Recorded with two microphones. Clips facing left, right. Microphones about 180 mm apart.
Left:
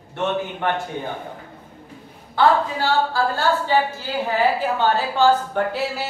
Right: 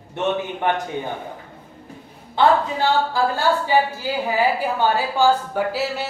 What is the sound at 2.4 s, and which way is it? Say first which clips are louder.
A woman's voice: right 1 dB; 20° right (ahead or behind).